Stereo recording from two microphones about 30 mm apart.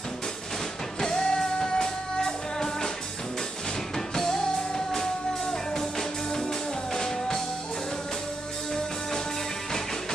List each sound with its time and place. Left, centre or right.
1.0 s music: centre
4.1 s music: centre